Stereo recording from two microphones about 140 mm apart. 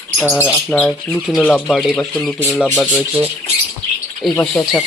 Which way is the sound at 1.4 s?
5° left (ahead or behind).